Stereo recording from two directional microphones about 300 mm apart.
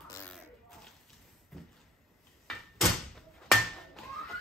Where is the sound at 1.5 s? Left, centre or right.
Centre.